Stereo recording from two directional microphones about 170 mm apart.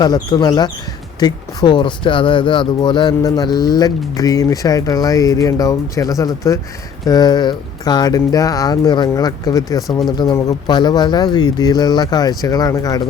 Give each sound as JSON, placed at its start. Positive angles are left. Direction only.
{"t": 0.0, "sound": "speech", "side_deg": 25}